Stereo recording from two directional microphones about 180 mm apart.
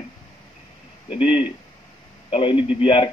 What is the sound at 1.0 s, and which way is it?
A man's voice, 30° left (ahead or behind).